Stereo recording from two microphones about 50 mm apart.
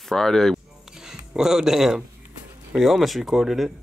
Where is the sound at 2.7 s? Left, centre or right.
Centre.